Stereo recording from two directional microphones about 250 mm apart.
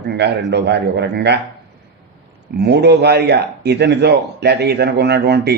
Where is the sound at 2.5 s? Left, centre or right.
Right.